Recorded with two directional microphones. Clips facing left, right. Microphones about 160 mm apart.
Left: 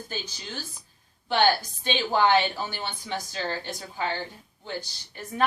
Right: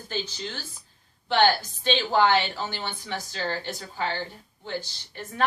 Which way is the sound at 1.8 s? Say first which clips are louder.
Right 2 dB; 15° left (ahead or behind).